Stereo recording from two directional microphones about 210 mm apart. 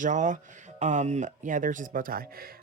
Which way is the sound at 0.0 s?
35° right (ahead or behind).